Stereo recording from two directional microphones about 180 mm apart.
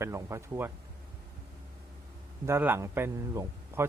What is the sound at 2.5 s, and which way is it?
A man's voice, 10° right (ahead or behind).